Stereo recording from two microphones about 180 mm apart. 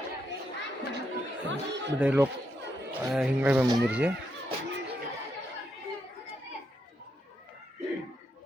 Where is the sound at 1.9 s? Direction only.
10° right (ahead or behind).